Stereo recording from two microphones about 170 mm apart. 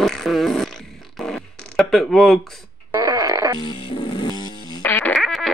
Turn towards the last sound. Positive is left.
turn(degrees=0)  # may be behind; listen again after turning